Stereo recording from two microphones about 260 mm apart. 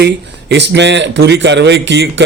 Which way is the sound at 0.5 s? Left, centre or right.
Right.